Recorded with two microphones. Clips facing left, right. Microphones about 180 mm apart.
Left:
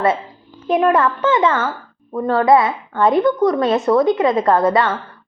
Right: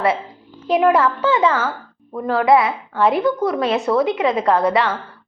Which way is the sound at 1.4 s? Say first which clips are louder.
Left 1 dB; centre (ahead or behind).